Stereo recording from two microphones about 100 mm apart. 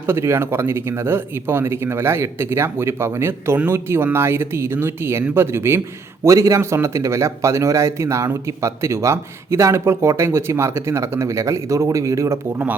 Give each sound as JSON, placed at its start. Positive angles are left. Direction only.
{"t": 0.0, "sound": "speech", "side_deg": -25}